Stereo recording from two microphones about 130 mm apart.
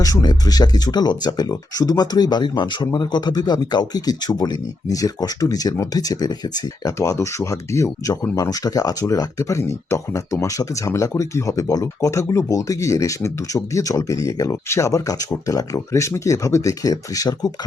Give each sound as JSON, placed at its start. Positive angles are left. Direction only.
{"t": 0.0, "sound": "speech", "side_deg": 30}